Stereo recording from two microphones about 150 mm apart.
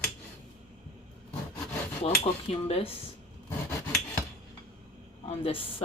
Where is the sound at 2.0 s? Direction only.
40° left (ahead or behind).